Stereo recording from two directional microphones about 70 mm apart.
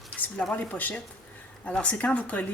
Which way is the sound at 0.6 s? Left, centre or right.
Left.